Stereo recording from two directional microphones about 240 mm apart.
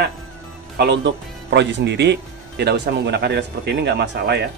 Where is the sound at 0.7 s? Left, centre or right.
Right.